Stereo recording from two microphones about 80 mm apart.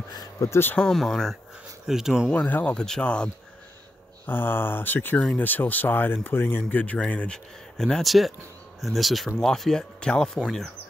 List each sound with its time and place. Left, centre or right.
0.1 s a sound: left
0.5 s speech: left
0.7 s speech: centre
2.3 s speech: centre
4.3 s speech: left
7.7 s speech: centre